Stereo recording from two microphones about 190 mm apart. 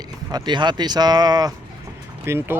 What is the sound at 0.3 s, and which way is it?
Speech, 20° right (ahead or behind).